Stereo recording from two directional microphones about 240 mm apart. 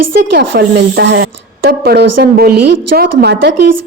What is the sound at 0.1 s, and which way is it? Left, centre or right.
Speech, right.